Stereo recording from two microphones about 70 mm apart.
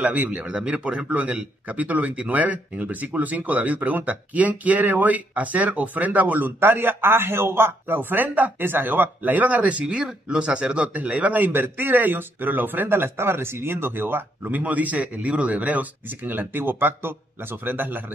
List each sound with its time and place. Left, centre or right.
0.0 s speech: right